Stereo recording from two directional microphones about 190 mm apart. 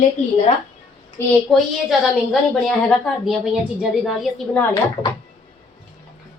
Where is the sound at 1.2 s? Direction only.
10° left (ahead or behind).